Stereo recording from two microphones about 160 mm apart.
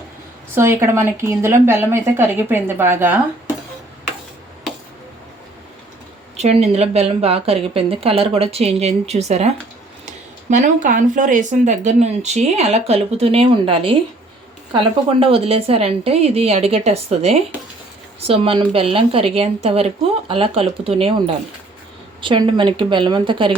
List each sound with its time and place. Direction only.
0.5 s speech: 15° right (ahead or behind)
6.3 s a woman's voice: 45° right (ahead or behind)